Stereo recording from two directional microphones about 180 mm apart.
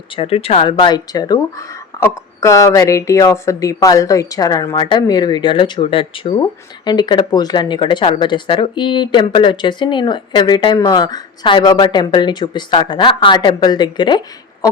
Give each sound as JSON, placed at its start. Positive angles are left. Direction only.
{"t": 0.2, "sound": "speech", "side_deg": 35}